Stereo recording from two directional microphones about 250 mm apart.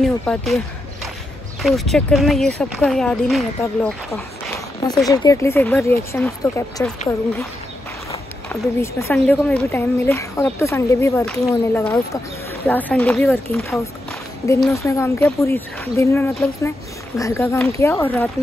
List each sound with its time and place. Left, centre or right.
0.0 s speech: centre
1.6 s speech: centre
5.0 s speech: centre
8.5 s speech: centre
14.7 s speech: centre